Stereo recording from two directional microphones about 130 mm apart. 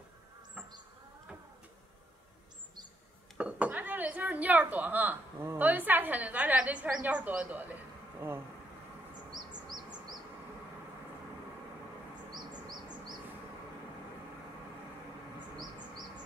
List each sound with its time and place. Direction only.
3.3 s speech: 10° right (ahead or behind)
9.5 s bird: 35° right (ahead or behind)